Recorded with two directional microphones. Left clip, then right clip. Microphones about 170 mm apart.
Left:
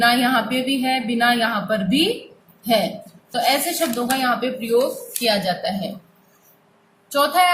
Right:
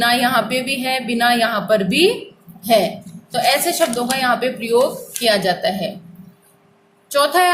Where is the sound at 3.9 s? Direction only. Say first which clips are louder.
Right 3 dB; 40° right (ahead or behind).